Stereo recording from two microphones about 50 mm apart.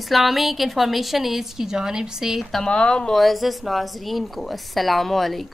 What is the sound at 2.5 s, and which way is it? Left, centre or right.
Speech, centre.